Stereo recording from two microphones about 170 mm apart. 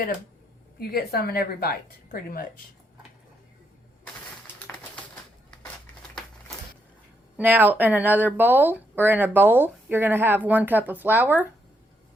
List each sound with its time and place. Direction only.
0.8 s a woman's voice: 65° left (ahead or behind)
4.6 s typewriter: 10° left (ahead or behind)
7.3 s speech: 10° right (ahead or behind)